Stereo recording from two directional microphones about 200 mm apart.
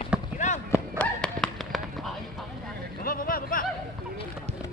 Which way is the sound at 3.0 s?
45° left (ahead or behind).